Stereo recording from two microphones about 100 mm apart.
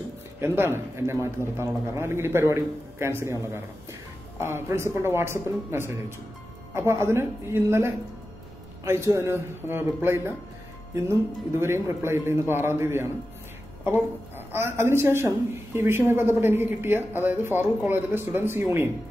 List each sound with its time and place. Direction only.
0.4 s a woman's voice: 25° right (ahead or behind)